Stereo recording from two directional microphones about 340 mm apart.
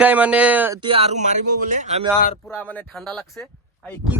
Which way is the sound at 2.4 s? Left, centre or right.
Centre.